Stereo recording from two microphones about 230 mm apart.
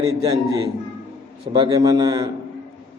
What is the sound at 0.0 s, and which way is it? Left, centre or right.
A man's voice, centre.